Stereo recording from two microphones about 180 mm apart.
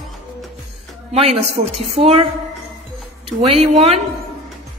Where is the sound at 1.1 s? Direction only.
35° right (ahead or behind).